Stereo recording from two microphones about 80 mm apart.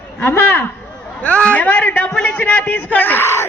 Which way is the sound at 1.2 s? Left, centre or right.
Centre.